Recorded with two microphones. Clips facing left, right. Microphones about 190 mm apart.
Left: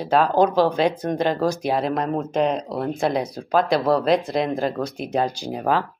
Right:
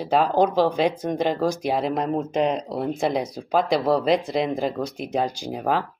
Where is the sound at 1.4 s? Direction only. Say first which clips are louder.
Left 1 dB; centre (ahead or behind).